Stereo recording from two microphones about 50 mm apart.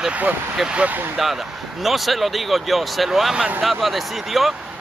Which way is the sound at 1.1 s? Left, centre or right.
Centre.